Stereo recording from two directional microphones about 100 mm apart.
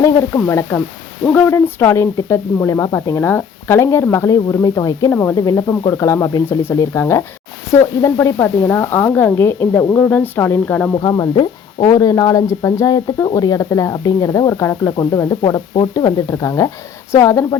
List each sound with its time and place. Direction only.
0.3 s speech: 25° left (ahead or behind)
1.2 s speech: 15° left (ahead or behind)
1.5 s speech: 25° left (ahead or behind)
5.1 s speech: 20° left (ahead or behind)
5.4 s speech: 35° left (ahead or behind); by 10.9 s 20° left (ahead or behind)
11.0 s speech: 40° left (ahead or behind)